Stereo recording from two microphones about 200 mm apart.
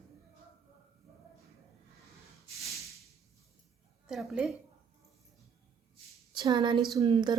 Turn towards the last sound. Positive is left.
turn(degrees=-20)  # may be behind; listen again after turning